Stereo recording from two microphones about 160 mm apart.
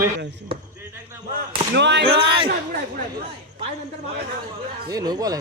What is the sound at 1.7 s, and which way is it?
Speech, 90° right.